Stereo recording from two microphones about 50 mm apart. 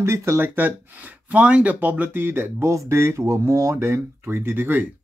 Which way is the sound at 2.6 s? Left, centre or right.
Right.